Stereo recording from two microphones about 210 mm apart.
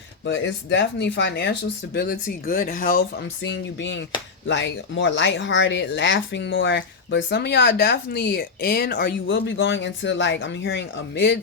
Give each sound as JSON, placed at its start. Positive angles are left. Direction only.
{"t": 0.3, "sound": "speech", "side_deg": 60}